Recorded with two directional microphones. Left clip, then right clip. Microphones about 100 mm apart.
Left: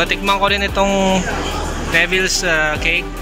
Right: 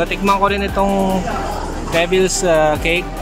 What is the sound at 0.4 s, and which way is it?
Music, 15° right (ahead or behind).